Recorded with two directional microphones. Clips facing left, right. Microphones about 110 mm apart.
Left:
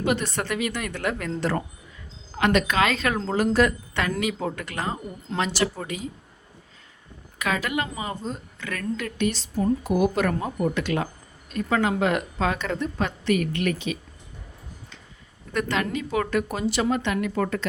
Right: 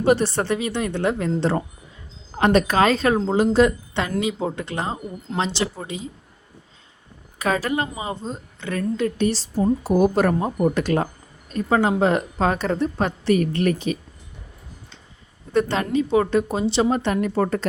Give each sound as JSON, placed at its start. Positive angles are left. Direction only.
{"t": 0.0, "sound": "a woman's voice", "side_deg": -35}
{"t": 3.2, "sound": "a woman's voice", "side_deg": -20}
{"t": 5.3, "sound": "speech", "side_deg": -5}
{"t": 5.9, "sound": "a woman's voice", "side_deg": -25}
{"t": 7.3, "sound": "a woman's voice", "side_deg": -35}
{"t": 15.5, "sound": "a woman's voice", "side_deg": -30}